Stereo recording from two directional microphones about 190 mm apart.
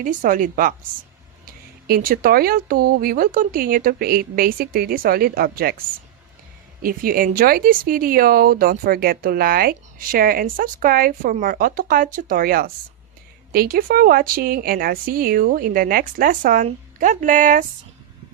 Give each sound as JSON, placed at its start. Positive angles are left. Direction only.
{"t": 0.0, "sound": "speech", "side_deg": -45}
{"t": 1.9, "sound": "speech", "side_deg": -50}
{"t": 6.8, "sound": "speech", "side_deg": -50}